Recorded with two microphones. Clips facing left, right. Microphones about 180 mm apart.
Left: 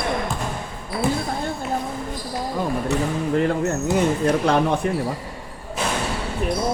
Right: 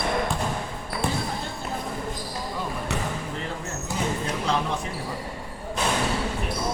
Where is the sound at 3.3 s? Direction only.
60° left (ahead or behind).